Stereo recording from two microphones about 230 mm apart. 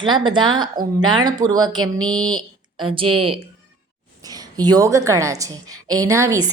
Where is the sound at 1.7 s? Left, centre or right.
Right.